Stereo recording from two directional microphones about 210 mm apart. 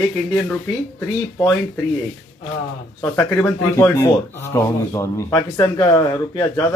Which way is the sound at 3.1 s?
10° left (ahead or behind).